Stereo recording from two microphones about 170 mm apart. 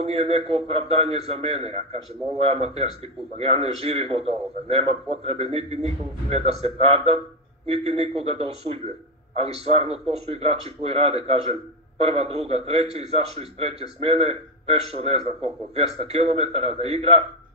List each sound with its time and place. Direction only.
0.0 s a man's voice: 35° right (ahead or behind)